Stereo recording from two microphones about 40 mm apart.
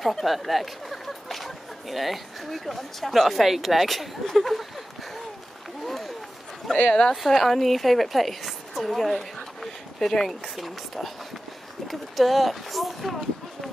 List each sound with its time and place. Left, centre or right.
0.0 s speech: centre
5.9 s a sound: centre
6.9 s speech: left
7.2 s a woman's voice: centre
10.5 s speech: centre
11.9 s a sound: centre